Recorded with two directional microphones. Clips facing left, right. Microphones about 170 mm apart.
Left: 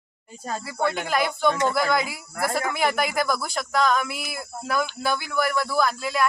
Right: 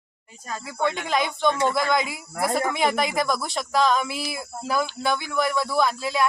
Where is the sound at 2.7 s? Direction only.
Centre (ahead or behind).